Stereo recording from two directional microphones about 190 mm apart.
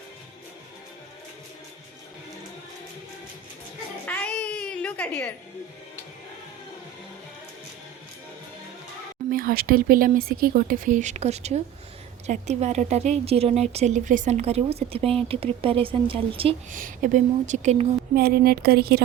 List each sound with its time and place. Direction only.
4.0 s music: 10° left (ahead or behind)
9.3 s speech: 50° right (ahead or behind); by 16.6 s 30° right (ahead or behind)
16.7 s speech: 45° right (ahead or behind)
18.1 s speech: 55° right (ahead or behind)